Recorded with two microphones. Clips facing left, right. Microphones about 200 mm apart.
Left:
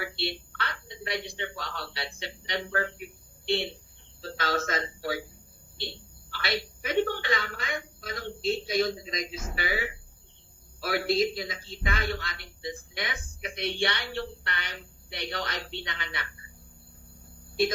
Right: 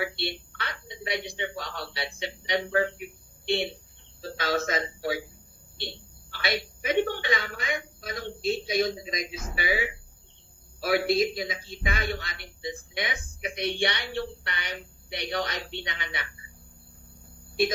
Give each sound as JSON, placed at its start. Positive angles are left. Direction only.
{"t": 0.0, "sound": "a woman's voice", "side_deg": -20}
{"t": 6.3, "sound": "a woman's voice", "side_deg": -20}